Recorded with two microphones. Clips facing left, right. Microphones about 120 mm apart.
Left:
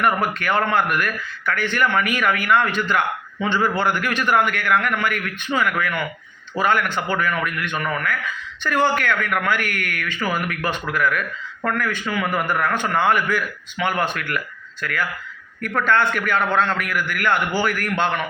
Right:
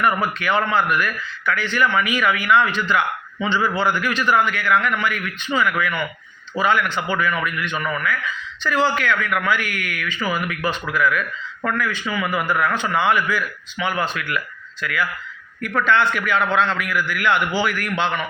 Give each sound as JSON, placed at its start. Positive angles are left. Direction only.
{"t": 0.0, "sound": "a man's voice", "side_deg": 50}
{"t": 6.6, "sound": "a man's voice", "side_deg": 50}